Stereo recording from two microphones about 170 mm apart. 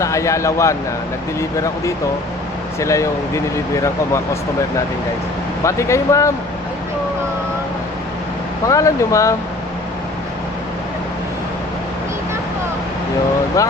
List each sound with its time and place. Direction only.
0.0 s speech: 20° left (ahead or behind)
5.6 s speech: 15° left (ahead or behind)
8.6 s speech: 20° left (ahead or behind)
13.6 s speech: 20° left (ahead or behind)